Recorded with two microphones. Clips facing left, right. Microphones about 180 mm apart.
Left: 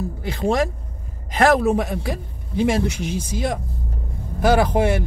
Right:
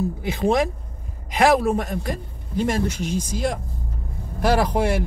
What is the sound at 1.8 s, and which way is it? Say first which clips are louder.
A man's voice: left 2 dB; 10° left (ahead or behind).